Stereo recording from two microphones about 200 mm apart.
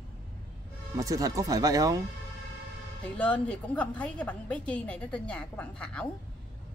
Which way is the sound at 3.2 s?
5° left (ahead or behind).